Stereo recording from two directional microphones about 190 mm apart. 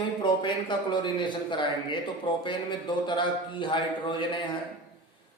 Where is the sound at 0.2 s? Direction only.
25° left (ahead or behind).